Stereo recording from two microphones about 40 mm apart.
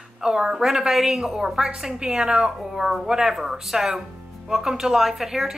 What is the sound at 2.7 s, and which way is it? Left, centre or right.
A woman's voice, centre.